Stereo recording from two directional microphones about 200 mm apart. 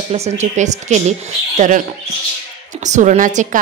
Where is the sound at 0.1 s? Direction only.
35° right (ahead or behind).